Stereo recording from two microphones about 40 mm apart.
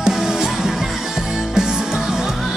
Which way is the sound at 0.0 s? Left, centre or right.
Centre.